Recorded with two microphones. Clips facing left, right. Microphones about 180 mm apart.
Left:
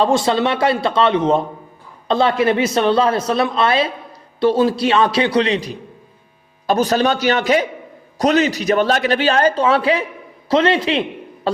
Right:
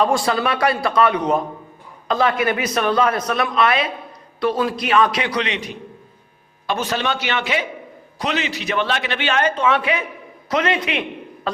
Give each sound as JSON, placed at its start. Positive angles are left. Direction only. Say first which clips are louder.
{"t": 0.0, "sound": "a man's voice", "louder": "left 3 dB", "side_deg": 25}